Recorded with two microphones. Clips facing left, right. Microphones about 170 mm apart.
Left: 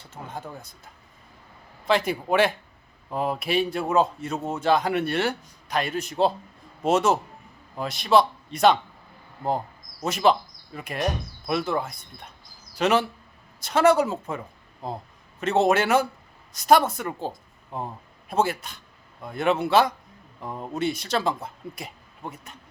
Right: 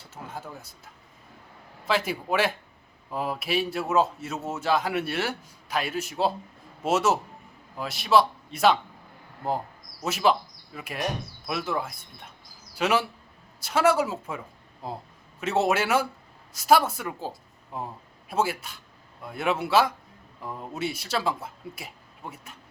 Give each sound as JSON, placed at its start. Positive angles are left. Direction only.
{"t": 0.0, "sound": "speech", "side_deg": -5}
{"t": 1.8, "sound": "a man's voice", "side_deg": -5}
{"t": 10.0, "sound": "a man's voice", "side_deg": -5}
{"t": 20.4, "sound": "speech", "side_deg": 25}
{"t": 20.7, "sound": "speech", "side_deg": -5}